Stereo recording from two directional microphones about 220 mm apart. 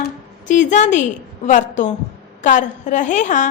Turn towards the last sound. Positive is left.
turn(degrees=35)  # may be behind; listen again after turning